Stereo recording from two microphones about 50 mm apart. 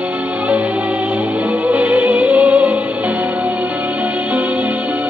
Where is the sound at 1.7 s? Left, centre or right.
Right.